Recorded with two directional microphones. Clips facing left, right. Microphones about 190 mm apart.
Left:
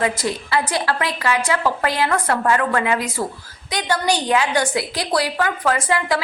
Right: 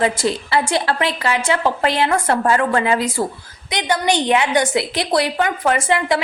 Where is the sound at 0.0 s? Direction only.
30° right (ahead or behind).